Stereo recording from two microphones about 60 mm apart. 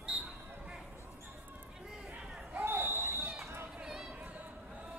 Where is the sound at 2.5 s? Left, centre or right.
Right.